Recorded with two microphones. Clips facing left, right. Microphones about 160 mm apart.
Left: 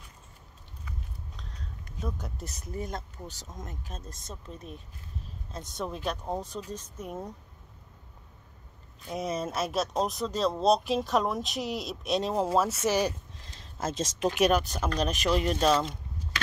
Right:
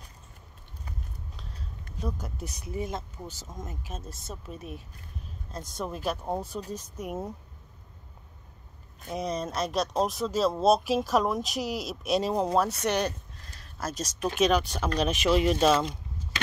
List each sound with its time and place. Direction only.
1.3 s a sound: 5° right (ahead or behind)
2.0 s speech: centre (ahead or behind)
9.1 s speech: 5° left (ahead or behind)
13.5 s speech: 20° left (ahead or behind)
14.4 s speech: centre (ahead or behind)